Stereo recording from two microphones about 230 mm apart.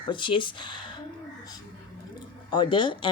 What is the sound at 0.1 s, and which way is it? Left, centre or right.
Speech, left.